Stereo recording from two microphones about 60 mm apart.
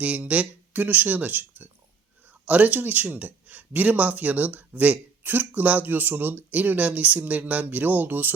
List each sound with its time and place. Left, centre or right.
0.0 s speech: right